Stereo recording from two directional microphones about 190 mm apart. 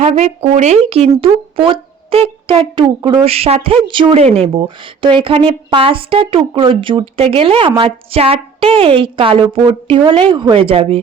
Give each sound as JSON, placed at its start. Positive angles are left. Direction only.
{"t": 0.0, "sound": "a woman's voice", "side_deg": -35}